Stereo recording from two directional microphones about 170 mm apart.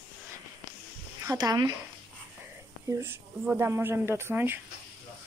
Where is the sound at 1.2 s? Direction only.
20° right (ahead or behind).